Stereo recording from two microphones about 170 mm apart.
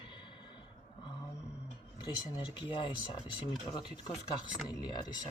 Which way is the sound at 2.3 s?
30° left (ahead or behind).